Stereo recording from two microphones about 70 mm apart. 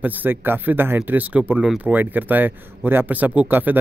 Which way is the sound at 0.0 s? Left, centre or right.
Right.